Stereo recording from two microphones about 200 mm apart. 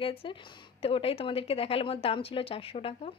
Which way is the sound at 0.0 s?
25° left (ahead or behind).